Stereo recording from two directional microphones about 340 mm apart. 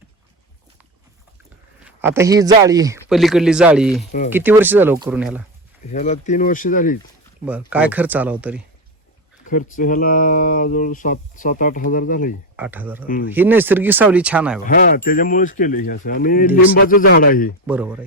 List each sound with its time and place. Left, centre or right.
1.8 s speech: centre
5.8 s speech: left
7.7 s speech: centre
9.5 s speech: left
12.5 s speech: centre
14.6 s speech: left
17.7 s speech: centre